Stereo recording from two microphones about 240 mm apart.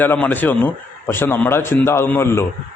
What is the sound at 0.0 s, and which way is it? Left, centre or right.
A man's voice, centre.